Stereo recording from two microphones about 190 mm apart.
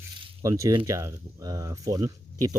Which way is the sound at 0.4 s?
15° right (ahead or behind).